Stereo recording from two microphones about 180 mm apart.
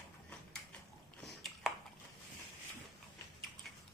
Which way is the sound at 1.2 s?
Centre (ahead or behind).